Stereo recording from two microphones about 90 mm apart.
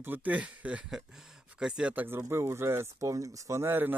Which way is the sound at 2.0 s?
30° right (ahead or behind).